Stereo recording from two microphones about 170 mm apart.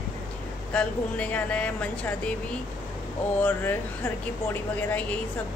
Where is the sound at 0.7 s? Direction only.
5° left (ahead or behind).